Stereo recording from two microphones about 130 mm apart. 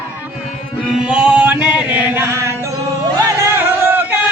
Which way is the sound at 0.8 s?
10° right (ahead or behind).